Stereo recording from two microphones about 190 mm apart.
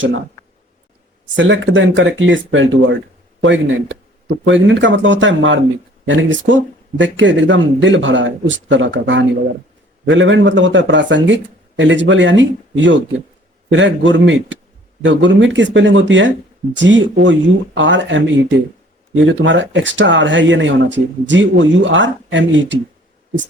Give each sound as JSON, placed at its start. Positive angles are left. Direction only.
{"t": 1.4, "sound": "speech", "side_deg": -75}